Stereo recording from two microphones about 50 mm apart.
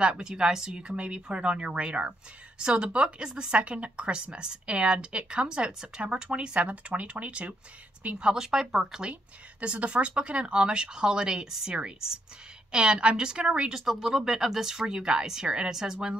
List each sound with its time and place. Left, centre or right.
0.0 s speech: centre
6.0 s speech: right
9.1 s speech: right
12.7 s speech: centre